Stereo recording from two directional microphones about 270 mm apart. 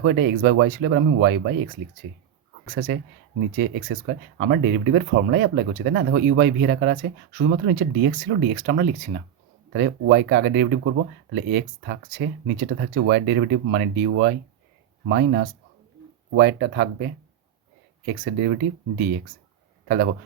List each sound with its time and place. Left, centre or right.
0.0 s speech: right
2.6 s speech: right
15.1 s speech: right